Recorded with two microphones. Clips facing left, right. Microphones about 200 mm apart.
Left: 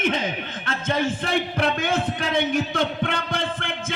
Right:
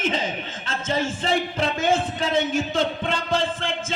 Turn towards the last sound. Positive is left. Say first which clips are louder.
# right 2 dB
turn(degrees=60)  # may be behind; listen again after turning